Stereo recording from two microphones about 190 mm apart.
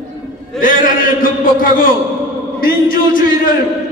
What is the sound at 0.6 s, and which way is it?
A man's voice, 45° left (ahead or behind).